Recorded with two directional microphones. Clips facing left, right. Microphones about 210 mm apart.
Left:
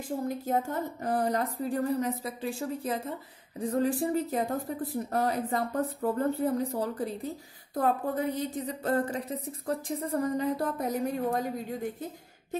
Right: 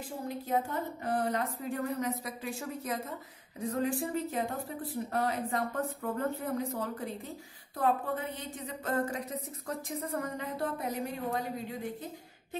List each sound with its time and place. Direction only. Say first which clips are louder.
0.3 s speech: even; 45° left (ahead or behind)